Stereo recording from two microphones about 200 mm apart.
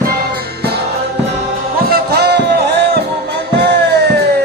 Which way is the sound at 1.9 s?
55° right (ahead or behind).